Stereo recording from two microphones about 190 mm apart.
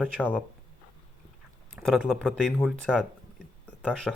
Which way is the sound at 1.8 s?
Centre (ahead or behind).